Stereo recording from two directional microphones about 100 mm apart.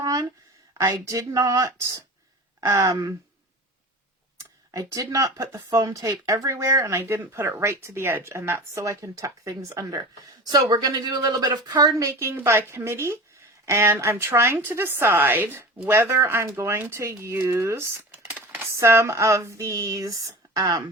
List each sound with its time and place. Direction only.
0.0 s a sound: 35° right (ahead or behind)
0.7 s speech: 30° right (ahead or behind)
4.4 s speech: 35° right (ahead or behind)
10.4 s speech: 45° right (ahead or behind); by 18.0 s 25° right (ahead or behind)
18.3 s a sound: 15° right (ahead or behind)
18.7 s speech: 25° right (ahead or behind)